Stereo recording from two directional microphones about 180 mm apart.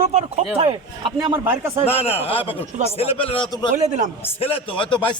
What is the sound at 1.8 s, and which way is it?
A man's voice, 35° left (ahead or behind).